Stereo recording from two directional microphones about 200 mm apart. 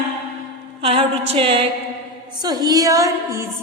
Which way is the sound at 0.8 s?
30° right (ahead or behind).